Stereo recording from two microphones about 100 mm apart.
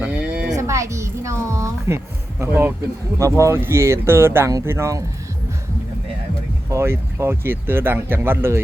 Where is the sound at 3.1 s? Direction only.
30° right (ahead or behind).